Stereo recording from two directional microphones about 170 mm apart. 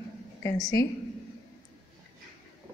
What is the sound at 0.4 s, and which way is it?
Speech, 20° left (ahead or behind).